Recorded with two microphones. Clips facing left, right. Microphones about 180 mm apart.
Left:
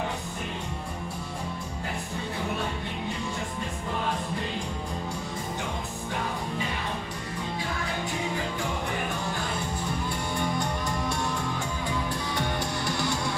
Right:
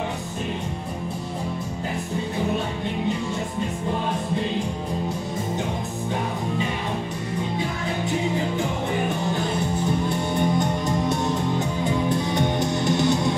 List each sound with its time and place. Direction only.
10.0 s music: 20° right (ahead or behind)